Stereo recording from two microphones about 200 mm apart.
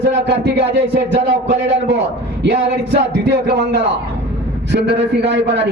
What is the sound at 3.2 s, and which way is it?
Speech, 60° right (ahead or behind).